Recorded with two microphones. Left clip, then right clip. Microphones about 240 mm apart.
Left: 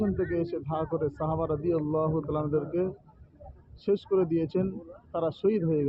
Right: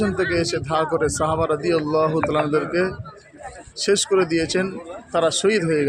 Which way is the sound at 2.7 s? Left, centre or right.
Centre.